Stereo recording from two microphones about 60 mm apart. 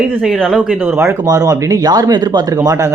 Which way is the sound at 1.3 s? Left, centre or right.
Right.